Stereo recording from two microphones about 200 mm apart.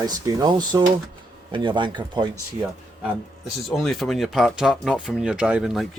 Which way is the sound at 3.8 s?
Centre (ahead or behind).